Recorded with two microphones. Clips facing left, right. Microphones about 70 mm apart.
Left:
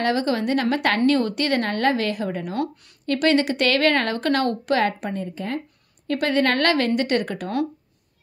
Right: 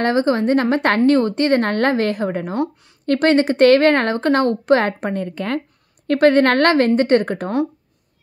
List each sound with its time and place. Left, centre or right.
0.0 s a woman's voice: right
5.1 s speech: right
6.0 s a woman's voice: right